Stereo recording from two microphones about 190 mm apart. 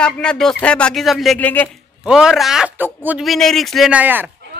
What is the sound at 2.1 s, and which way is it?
Speech, 5° right (ahead or behind).